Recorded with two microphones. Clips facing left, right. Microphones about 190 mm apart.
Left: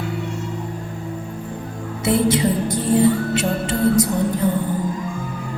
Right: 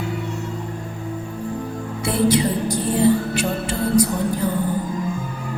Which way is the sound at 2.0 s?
25° left (ahead or behind).